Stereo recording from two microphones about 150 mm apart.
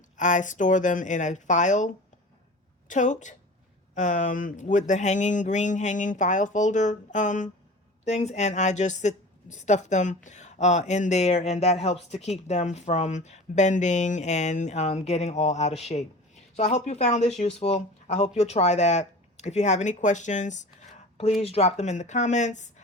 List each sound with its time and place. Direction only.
0.2 s speech: 55° left (ahead or behind)